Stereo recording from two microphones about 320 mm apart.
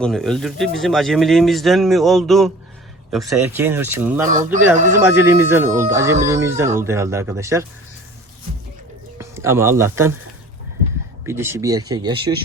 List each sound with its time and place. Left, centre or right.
0.0 s speech: centre
4.8 s speech: right
5.1 s speech: centre
9.1 s speech: centre
11.3 s speech: centre